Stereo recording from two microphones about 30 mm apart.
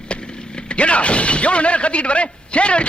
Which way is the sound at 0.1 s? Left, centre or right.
Left.